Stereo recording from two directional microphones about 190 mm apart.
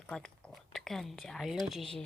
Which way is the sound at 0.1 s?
5° left (ahead or behind).